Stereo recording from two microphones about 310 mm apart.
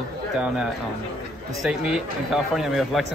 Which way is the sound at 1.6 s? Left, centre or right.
Centre.